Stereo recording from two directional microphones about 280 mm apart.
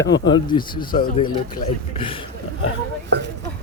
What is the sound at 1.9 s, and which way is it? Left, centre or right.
Speech, centre.